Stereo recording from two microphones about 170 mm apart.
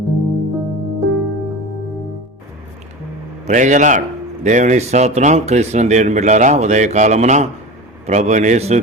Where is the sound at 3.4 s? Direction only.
45° right (ahead or behind).